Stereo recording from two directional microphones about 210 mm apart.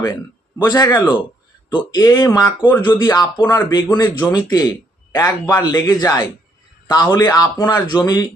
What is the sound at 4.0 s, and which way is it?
A man's voice, 10° left (ahead or behind).